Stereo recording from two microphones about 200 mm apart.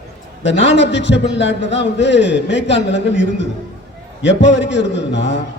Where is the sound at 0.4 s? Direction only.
65° left (ahead or behind).